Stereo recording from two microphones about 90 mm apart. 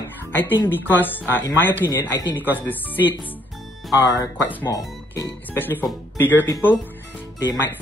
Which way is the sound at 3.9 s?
40° left (ahead or behind).